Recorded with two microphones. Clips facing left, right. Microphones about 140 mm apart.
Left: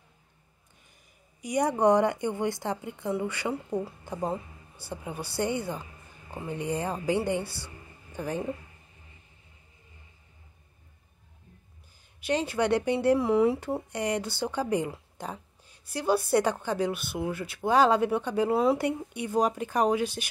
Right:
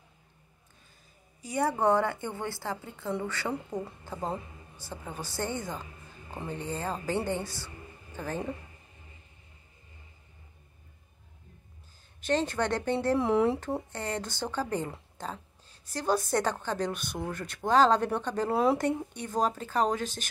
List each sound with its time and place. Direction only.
1.4 s a woman's voice: 15° left (ahead or behind)
12.2 s speech: 10° left (ahead or behind)
13.2 s speech: centre (ahead or behind)